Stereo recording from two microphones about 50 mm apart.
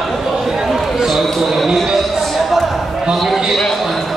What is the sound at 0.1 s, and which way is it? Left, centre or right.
Basketball bounce, centre.